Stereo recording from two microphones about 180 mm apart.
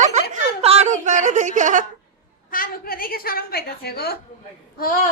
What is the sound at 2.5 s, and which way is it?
A woman's voice, 55° left (ahead or behind).